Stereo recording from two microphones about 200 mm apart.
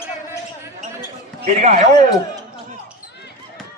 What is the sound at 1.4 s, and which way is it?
Speech, 35° right (ahead or behind).